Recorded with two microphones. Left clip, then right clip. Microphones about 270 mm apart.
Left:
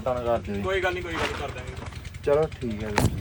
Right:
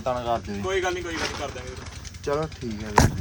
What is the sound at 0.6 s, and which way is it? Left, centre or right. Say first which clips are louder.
Speech: right 1 dB; right.